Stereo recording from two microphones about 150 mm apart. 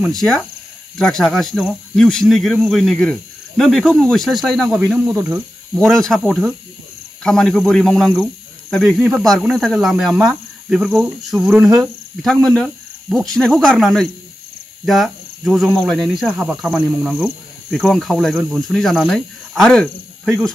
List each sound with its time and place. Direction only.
0.2 s speech: centre (ahead or behind)
5.8 s speech: 5° left (ahead or behind)